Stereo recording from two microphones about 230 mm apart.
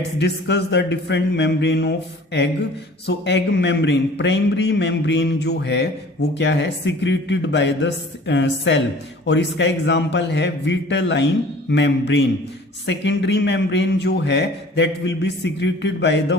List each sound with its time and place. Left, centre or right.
0.2 s a man's voice: left